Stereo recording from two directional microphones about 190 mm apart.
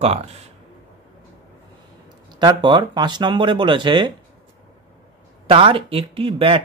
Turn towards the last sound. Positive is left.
turn(degrees=-30)  # may be behind; listen again after turning